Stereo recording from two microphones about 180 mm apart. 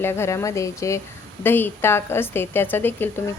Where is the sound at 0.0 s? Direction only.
15° left (ahead or behind).